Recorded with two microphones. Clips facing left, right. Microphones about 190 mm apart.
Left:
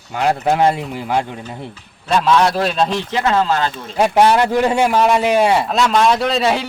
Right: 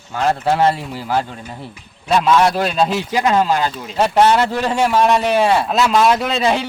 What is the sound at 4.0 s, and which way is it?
A man's voice, 10° left (ahead or behind).